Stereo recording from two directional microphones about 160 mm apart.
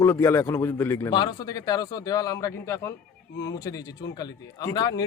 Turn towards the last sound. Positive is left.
turn(degrees=25)  # may be behind; listen again after turning